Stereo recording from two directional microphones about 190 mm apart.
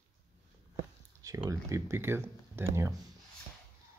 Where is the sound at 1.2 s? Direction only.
20° right (ahead or behind).